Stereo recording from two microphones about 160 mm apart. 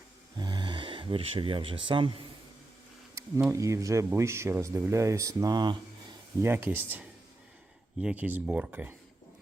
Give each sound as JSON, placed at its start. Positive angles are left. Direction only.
{"t": 0.3, "sound": "a sound", "side_deg": -25}
{"t": 3.5, "sound": "speech", "side_deg": -20}
{"t": 6.4, "sound": "speech", "side_deg": -15}